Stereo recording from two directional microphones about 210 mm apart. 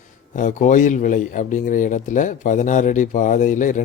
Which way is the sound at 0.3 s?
35° left (ahead or behind).